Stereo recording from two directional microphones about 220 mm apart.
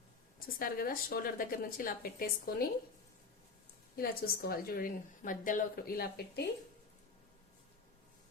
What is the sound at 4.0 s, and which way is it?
A woman's voice, 45° left (ahead or behind).